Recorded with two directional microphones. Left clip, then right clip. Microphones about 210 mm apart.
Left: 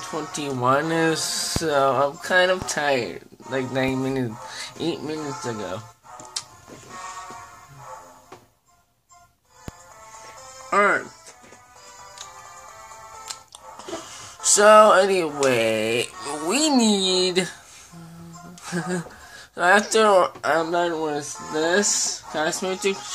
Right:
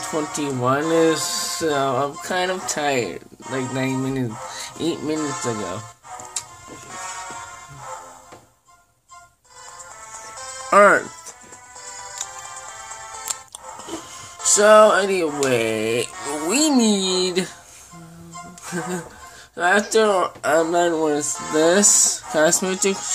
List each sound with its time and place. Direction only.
0.3 s speech: centre (ahead or behind)
4.5 s music: centre (ahead or behind)
5.4 s speech: 20° right (ahead or behind)
10.7 s speech: 25° right (ahead or behind)
13.7 s speech: 5° right (ahead or behind)
19.5 s speech: 5° left (ahead or behind); by 23.1 s 25° right (ahead or behind)